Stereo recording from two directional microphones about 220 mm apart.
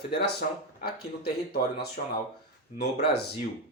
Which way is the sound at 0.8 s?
45° left (ahead or behind).